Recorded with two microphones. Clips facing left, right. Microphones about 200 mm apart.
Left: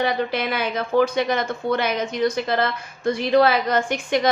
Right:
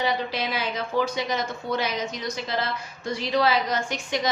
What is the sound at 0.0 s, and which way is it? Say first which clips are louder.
Speech: left 4 dB; 55° left (ahead or behind).